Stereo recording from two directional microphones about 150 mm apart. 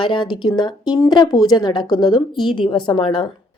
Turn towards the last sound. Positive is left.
turn(degrees=35)  # may be behind; listen again after turning